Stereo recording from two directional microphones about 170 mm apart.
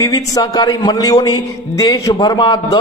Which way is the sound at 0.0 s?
20° left (ahead or behind).